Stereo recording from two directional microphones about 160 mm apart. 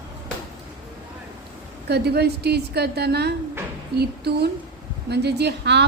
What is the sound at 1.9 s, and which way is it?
A woman's voice, 90° right.